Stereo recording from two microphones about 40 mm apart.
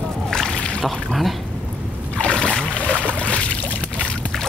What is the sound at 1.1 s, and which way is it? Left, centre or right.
Speech, centre.